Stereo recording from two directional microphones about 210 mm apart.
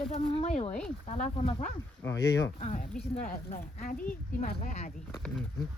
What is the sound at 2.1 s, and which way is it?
Speech, 55° left (ahead or behind).